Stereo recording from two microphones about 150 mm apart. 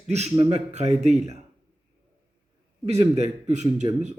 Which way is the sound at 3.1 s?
50° right (ahead or behind).